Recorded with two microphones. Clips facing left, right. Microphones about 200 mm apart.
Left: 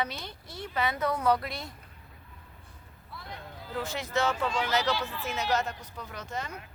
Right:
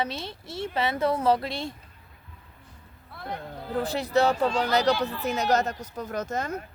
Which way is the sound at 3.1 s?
55° right (ahead or behind).